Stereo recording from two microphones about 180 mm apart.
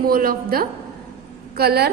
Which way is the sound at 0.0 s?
55° right (ahead or behind).